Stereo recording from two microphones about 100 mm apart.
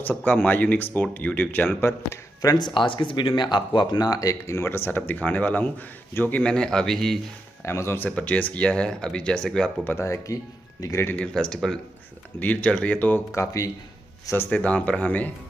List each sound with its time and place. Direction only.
0.0 s speech: 20° left (ahead or behind)
2.4 s speech: 45° left (ahead or behind); by 6.4 s 20° left (ahead or behind)
6.4 s speech: 10° left (ahead or behind)
7.6 s speech: 25° left (ahead or behind)
8.1 s speech: 15° left (ahead or behind)
9.8 s speech: 25° left (ahead or behind)
11.1 s speech: 10° left (ahead or behind)
13.3 s speech: 30° left (ahead or behind)
14.3 s speech: 20° left (ahead or behind)